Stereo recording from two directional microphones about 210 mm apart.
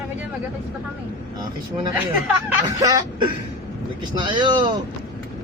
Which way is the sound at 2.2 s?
10° right (ahead or behind).